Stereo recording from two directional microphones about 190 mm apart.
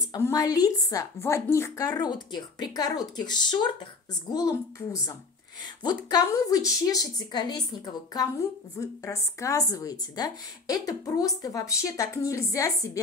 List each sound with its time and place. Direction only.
0.1 s a woman's voice: 20° left (ahead or behind)